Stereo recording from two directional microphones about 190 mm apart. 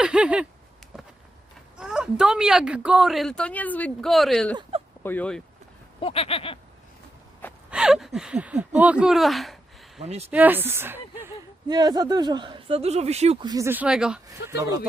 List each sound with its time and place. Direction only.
0.0 s a sound: 5° right (ahead or behind)
1.8 s speech: 5° right (ahead or behind)
4.7 s a sound: 30° right (ahead or behind)
5.0 s speech: 5° left (ahead or behind)
6.0 s a sound: 30° left (ahead or behind)
7.7 s speech: 5° right (ahead or behind)
10.0 s speech: 35° right (ahead or behind)
10.2 s a woman's voice: 10° right (ahead or behind)
14.3 s a woman's voice: 20° right (ahead or behind)